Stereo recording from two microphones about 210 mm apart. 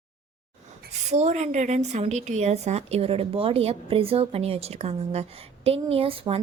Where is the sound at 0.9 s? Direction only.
35° right (ahead or behind).